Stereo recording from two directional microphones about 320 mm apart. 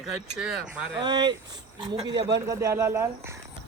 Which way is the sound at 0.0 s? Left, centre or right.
Centre.